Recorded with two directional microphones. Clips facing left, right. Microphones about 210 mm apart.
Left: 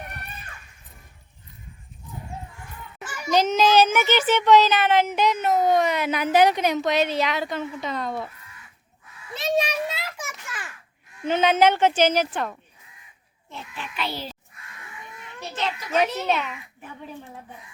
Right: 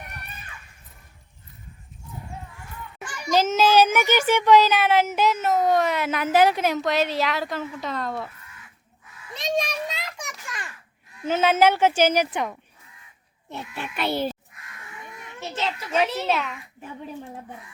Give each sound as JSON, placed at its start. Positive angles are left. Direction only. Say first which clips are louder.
{"t": 3.0, "sound": "a child's voice", "louder": "even", "side_deg": 5}
{"t": 9.3, "sound": "children playing", "louder": "left 2 dB", "side_deg": 5}
{"t": 11.3, "sound": "a woman's voice", "louder": "even", "side_deg": -5}
{"t": 13.7, "sound": "a child's voice", "louder": "right 5 dB", "side_deg": -50}
{"t": 15.4, "sound": "children playing", "louder": "even", "side_deg": -25}
{"t": 16.1, "sound": "a child's voice", "louder": "even", "side_deg": 0}